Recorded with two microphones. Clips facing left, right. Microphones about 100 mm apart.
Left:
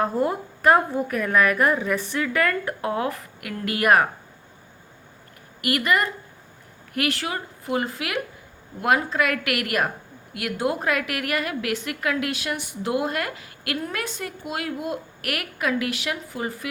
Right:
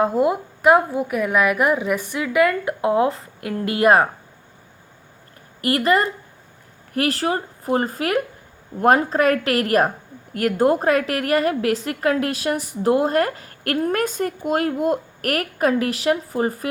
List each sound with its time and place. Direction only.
0.0 s a woman's voice: 10° right (ahead or behind); by 4.1 s 25° right (ahead or behind)
5.6 s a woman's voice: 30° right (ahead or behind)